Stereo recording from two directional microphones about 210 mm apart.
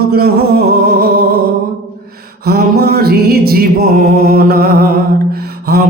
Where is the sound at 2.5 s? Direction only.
45° right (ahead or behind).